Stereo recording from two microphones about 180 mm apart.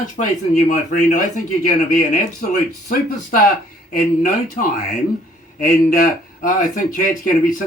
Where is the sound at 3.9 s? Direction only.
50° left (ahead or behind).